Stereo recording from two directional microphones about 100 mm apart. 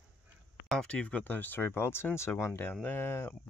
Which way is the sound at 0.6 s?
10° left (ahead or behind).